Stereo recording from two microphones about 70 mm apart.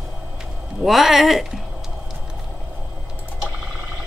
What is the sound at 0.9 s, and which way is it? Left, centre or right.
Speech, centre.